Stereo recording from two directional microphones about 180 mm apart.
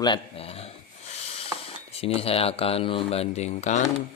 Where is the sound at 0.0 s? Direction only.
30° left (ahead or behind).